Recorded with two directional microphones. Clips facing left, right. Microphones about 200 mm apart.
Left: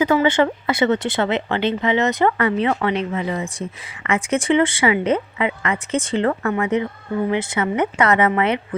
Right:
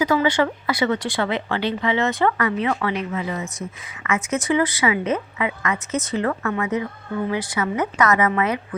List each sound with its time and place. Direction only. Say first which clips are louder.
0.0 s speech: left 3 dB; 25° left (ahead or behind)